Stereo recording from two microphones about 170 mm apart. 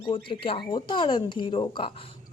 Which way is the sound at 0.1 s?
30° left (ahead or behind).